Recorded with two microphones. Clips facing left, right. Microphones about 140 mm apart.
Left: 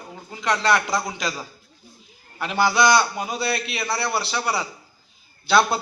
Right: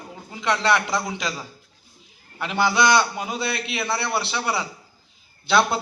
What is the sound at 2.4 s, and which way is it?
A man's voice, 20° right (ahead or behind).